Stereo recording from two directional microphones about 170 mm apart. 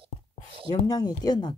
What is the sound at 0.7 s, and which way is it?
Speech, 25° left (ahead or behind).